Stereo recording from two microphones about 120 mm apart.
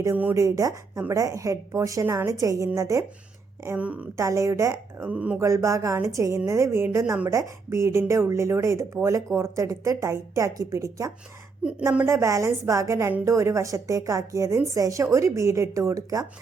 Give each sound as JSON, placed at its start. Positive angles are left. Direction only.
{"t": 0.0, "sound": "speech", "side_deg": -20}
{"t": 3.8, "sound": "speech", "side_deg": -10}
{"t": 4.2, "sound": "speech", "side_deg": -25}
{"t": 4.9, "sound": "speech", "side_deg": -10}
{"t": 5.4, "sound": "speech", "side_deg": -25}